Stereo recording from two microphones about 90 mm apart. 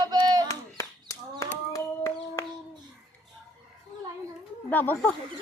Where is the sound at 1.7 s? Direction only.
40° left (ahead or behind).